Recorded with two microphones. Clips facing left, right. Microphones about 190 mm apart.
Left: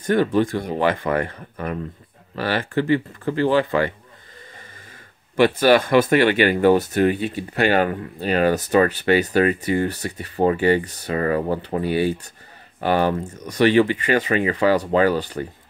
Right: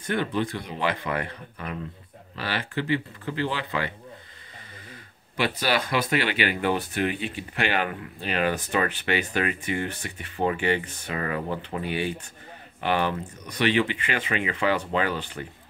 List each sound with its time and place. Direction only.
0.0 s speech: 45° left (ahead or behind)
5.3 s speech: 50° left (ahead or behind)